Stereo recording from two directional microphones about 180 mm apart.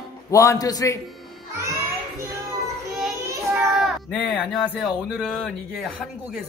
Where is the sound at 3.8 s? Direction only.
Centre (ahead or behind).